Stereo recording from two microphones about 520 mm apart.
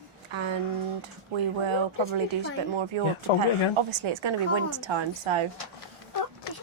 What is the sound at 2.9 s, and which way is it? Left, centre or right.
Speech, right.